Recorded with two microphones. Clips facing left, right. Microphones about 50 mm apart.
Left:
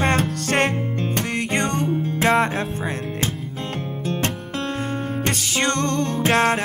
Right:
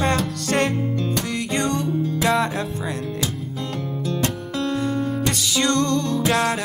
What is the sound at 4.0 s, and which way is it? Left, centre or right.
Music, left.